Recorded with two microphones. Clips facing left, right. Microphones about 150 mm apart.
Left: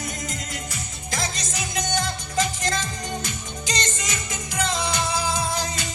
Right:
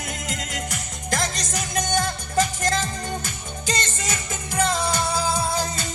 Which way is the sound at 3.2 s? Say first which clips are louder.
Left 1 dB; 45° right (ahead or behind).